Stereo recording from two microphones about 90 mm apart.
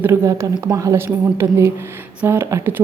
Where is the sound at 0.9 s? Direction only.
30° right (ahead or behind).